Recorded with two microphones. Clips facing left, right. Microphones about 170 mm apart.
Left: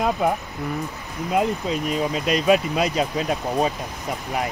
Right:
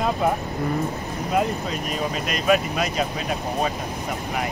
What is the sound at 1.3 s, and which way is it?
Speech, 20° left (ahead or behind).